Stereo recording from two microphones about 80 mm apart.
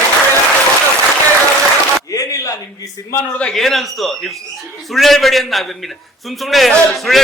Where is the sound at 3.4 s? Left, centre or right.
Centre.